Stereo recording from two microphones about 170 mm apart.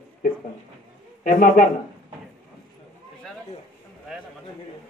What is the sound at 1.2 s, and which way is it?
Speech, 55° left (ahead or behind).